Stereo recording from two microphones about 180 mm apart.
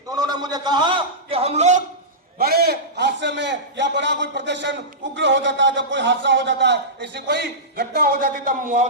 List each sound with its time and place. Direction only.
0.1 s a man's voice: 20° right (ahead or behind); by 1.8 s 40° right (ahead or behind)
2.4 s a man's voice: 60° right (ahead or behind)